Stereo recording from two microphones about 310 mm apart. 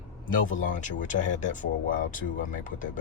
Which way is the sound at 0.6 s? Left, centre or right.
Left.